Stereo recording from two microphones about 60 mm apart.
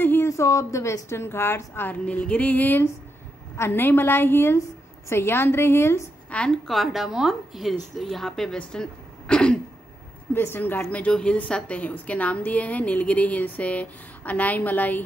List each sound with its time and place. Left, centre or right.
0.0 s a sound: left
0.3 s a woman's voice: left
2.0 s a woman's voice: left
3.5 s a woman's voice: left
6.5 s a woman's voice: centre
9.3 s throat clearing: centre
10.3 s a woman's voice: left
10.9 s a woman's voice: left